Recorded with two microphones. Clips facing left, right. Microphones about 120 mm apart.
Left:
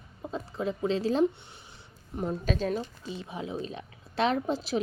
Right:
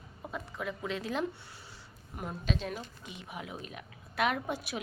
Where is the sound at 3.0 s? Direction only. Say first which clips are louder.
Left 7 dB; 30° left (ahead or behind).